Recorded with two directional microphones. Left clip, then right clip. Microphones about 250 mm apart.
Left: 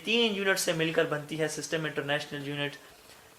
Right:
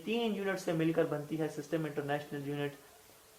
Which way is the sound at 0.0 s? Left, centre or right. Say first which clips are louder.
Left 8 dB; left.